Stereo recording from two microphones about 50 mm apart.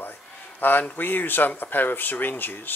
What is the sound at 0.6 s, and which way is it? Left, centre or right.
Speech, left.